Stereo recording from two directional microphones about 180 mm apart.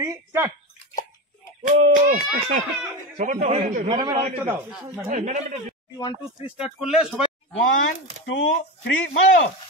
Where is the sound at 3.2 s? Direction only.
50° right (ahead or behind).